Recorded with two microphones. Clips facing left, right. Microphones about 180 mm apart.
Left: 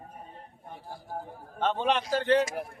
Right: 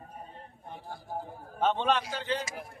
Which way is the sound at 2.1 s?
60° left (ahead or behind).